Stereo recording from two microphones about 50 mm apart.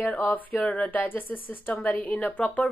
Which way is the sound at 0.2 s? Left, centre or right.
Left.